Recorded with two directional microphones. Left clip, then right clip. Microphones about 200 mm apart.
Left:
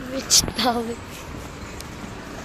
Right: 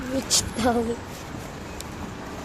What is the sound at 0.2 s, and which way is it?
Speech, 35° right (ahead or behind).